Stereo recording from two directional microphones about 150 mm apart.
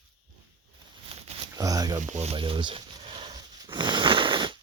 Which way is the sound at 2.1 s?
45° right (ahead or behind).